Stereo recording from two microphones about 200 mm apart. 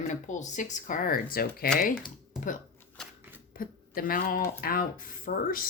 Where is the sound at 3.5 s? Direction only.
45° left (ahead or behind).